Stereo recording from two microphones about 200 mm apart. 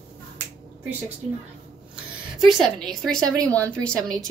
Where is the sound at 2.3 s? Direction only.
Centre (ahead or behind).